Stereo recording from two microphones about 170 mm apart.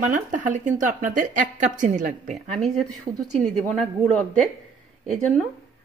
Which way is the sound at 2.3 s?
Centre (ahead or behind).